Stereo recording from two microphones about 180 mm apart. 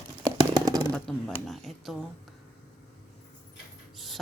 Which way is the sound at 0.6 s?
20° right (ahead or behind).